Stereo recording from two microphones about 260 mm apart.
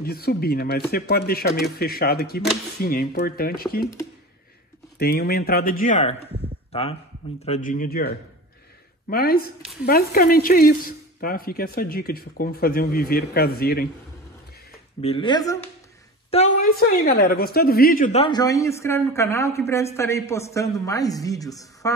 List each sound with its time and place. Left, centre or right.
0.0 s speech: left
4.9 s speech: left
15.0 s a woman's voice: left
16.3 s a sound: left
16.6 s a woman's voice: left; by 21.9 s centre